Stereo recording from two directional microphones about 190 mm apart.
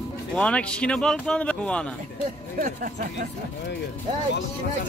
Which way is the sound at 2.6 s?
45° right (ahead or behind).